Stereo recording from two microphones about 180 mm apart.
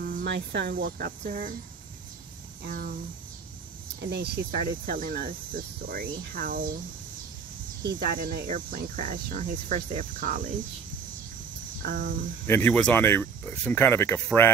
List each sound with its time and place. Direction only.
0.0 s speech: 60° right (ahead or behind)
2.6 s speech: 60° right (ahead or behind)
4.0 s cricket: 65° right (ahead or behind)
7.8 s cricket: 60° right (ahead or behind)
11.8 s cricket: 50° right (ahead or behind)
12.4 s speech: 10° left (ahead or behind)